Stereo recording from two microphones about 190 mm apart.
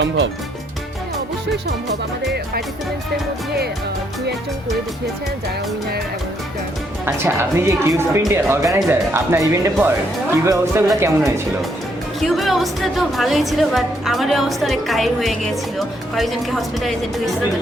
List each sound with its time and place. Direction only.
7.0 s speech: 10° right (ahead or behind)
12.2 s speech: centre (ahead or behind)